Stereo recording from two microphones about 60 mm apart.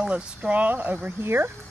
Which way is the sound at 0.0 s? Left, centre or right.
Centre.